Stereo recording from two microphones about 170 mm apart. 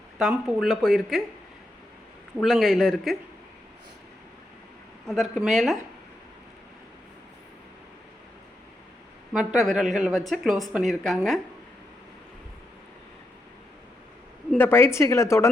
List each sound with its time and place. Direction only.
0.2 s speech: centre (ahead or behind)
2.4 s speech: centre (ahead or behind)
5.0 s speech: centre (ahead or behind)
9.3 s speech: 5° right (ahead or behind)
14.6 s speech: 15° left (ahead or behind)